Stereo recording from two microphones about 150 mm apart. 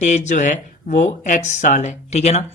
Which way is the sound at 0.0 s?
50° left (ahead or behind).